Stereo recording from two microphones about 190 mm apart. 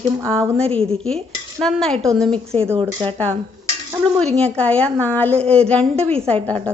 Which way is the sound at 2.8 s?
25° right (ahead or behind).